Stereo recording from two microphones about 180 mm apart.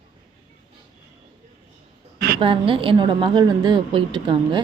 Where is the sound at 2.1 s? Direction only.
60° right (ahead or behind).